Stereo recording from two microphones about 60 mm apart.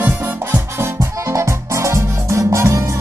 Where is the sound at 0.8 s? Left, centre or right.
Right.